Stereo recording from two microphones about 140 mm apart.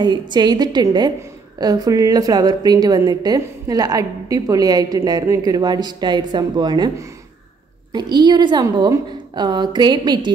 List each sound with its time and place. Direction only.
0.0 s a woman's voice: 30° right (ahead or behind)